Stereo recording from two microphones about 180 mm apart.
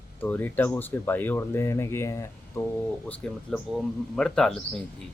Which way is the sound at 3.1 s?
5° left (ahead or behind).